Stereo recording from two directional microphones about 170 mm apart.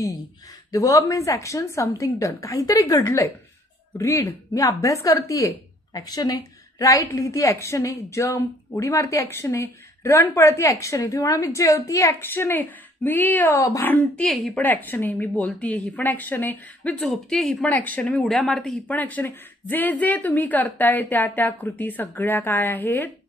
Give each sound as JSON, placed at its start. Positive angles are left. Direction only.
{"t": 0.7, "sound": "a woman's voice", "side_deg": 20}